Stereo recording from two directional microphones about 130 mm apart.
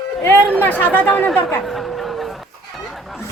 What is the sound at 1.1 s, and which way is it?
Speech, 5° left (ahead or behind).